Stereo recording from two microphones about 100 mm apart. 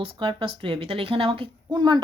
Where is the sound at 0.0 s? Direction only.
55° right (ahead or behind).